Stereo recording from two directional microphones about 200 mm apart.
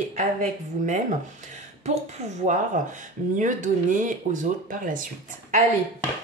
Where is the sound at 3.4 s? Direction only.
40° right (ahead or behind).